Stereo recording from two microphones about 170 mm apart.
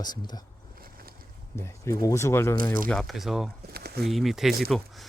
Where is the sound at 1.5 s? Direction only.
15° left (ahead or behind).